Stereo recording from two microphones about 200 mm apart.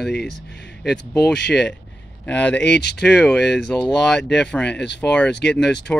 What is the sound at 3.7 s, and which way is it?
Speech, 5° left (ahead or behind).